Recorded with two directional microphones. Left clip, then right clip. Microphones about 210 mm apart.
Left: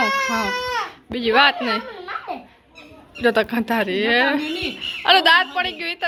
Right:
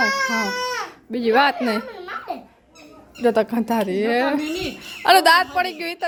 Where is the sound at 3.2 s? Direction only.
20° right (ahead or behind).